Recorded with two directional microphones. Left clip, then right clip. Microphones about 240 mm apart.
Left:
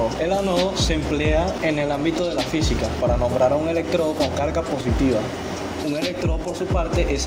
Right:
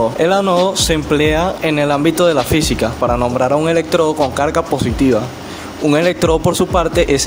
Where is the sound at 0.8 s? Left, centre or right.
Right.